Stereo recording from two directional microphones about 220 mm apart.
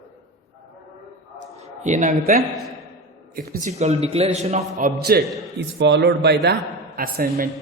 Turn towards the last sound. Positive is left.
turn(degrees=-40)  # may be behind; listen again after turning